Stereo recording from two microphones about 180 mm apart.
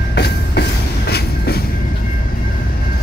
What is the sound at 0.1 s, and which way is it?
Train, 65° left (ahead or behind).